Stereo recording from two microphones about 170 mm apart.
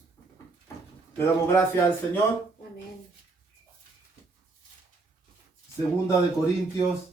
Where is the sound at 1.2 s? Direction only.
15° left (ahead or behind).